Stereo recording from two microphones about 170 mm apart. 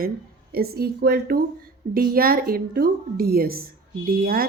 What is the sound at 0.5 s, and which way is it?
A woman's voice, 65° right (ahead or behind).